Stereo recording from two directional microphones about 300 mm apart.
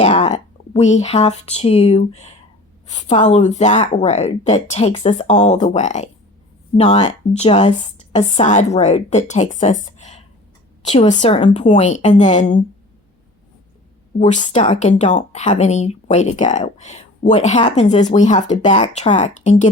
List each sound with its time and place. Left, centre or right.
0.0 s speech: left
14.2 s speech: left